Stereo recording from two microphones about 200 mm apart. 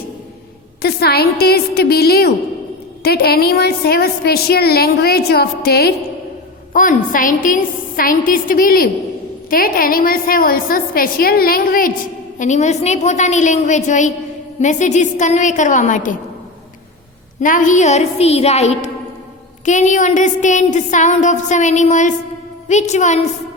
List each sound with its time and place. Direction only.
0.8 s a woman's voice: 50° left (ahead or behind)
17.4 s a woman's voice: 40° left (ahead or behind)